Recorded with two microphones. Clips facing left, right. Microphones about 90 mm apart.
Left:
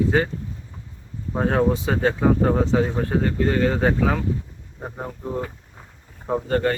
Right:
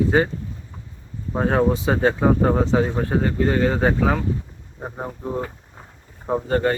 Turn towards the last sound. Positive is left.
turn(degrees=-20)  # may be behind; listen again after turning